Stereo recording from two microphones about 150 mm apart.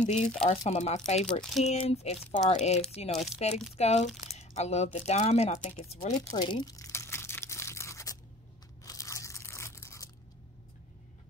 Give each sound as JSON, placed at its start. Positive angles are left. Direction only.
{"t": 0.0, "sound": "speech", "side_deg": 50}
{"t": 6.0, "sound": "crumpling", "side_deg": 25}
{"t": 8.8, "sound": "crunch", "side_deg": 20}